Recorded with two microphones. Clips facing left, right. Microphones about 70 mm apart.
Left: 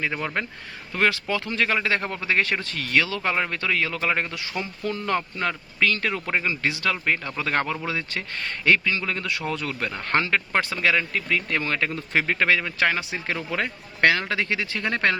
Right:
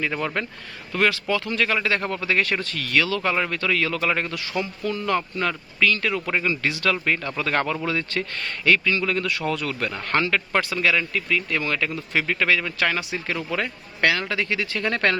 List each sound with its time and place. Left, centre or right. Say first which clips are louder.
0.0 s speech: right 2 dB; centre
0.9 s speech: right 1 dB; left